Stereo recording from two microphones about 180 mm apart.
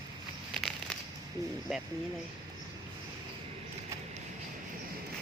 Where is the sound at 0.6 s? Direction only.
Centre (ahead or behind).